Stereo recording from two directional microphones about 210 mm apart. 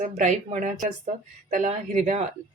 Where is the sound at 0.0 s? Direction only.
35° right (ahead or behind).